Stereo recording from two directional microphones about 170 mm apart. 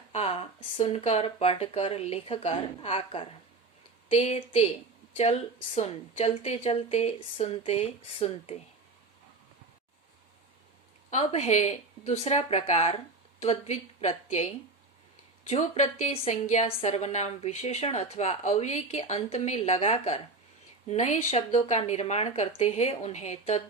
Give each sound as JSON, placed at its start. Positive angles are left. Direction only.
{"t": 0.1, "sound": "a woman's voice", "side_deg": 35}
{"t": 11.1, "sound": "a woman's voice", "side_deg": 40}